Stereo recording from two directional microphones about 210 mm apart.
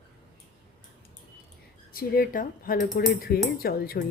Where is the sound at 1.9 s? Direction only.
45° left (ahead or behind).